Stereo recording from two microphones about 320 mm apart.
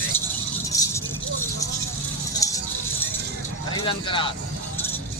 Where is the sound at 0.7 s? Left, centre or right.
Centre.